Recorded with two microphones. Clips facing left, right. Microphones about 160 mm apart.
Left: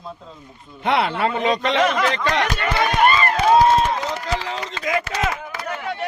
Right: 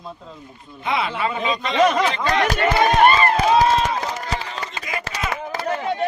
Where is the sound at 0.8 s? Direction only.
70° left (ahead or behind).